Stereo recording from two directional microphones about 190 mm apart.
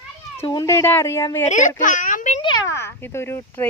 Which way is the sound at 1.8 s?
45° left (ahead or behind).